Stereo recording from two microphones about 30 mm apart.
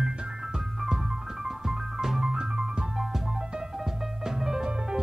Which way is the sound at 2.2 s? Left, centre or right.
Right.